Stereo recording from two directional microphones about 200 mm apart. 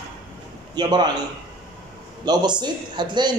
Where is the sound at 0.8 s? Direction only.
20° right (ahead or behind).